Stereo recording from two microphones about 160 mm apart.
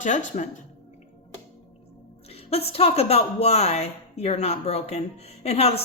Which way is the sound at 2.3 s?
40° left (ahead or behind).